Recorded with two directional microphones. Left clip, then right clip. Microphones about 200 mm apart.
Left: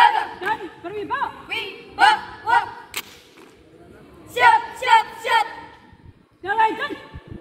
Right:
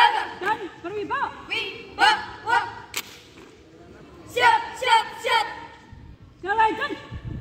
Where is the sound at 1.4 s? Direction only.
5° left (ahead or behind).